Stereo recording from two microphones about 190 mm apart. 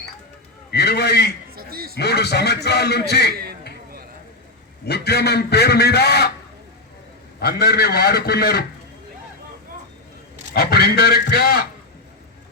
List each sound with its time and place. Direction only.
0.7 s a man's voice: 60° left (ahead or behind)
1.5 s a sound: 50° right (ahead or behind)
2.0 s a man's voice: 60° left (ahead or behind)
4.9 s a man's voice: 60° left (ahead or behind)
7.3 s a man's voice: 55° left (ahead or behind)
10.5 s a man's voice: 55° left (ahead or behind)